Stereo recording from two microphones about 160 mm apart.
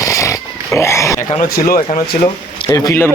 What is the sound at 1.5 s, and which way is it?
Speech, 65° left (ahead or behind).